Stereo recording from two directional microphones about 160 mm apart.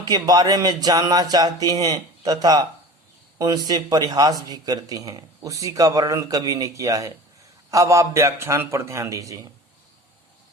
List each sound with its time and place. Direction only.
0.0 s a man's voice: 25° right (ahead or behind)